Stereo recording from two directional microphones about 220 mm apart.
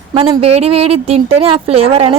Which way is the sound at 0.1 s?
25° right (ahead or behind).